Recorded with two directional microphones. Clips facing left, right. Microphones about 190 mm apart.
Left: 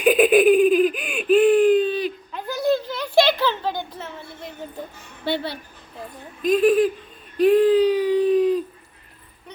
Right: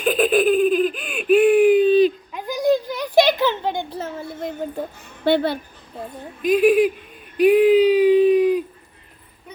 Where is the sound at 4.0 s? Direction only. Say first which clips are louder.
Right 7 dB; 40° right (ahead or behind).